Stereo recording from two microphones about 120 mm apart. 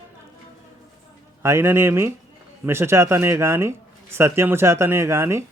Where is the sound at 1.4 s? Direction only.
20° right (ahead or behind).